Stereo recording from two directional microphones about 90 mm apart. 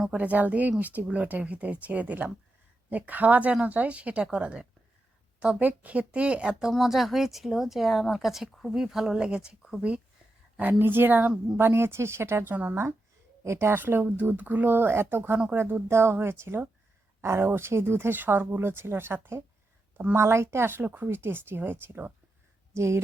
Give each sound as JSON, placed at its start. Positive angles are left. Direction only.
{"t": 0.1, "sound": "speech", "side_deg": -15}
{"t": 10.6, "sound": "speech", "side_deg": -20}